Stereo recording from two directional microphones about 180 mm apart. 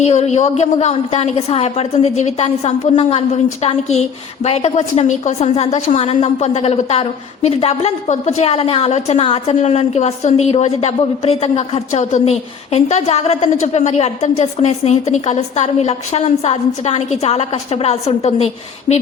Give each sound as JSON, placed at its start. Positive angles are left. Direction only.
{"t": 0.0, "sound": "a woman's voice", "side_deg": 40}